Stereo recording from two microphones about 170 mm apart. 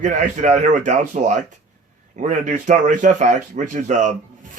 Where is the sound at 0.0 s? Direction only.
45° right (ahead or behind).